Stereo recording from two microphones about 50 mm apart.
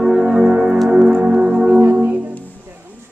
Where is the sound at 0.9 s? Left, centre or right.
Right.